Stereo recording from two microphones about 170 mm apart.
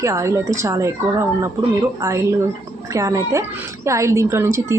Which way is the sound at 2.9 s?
20° right (ahead or behind).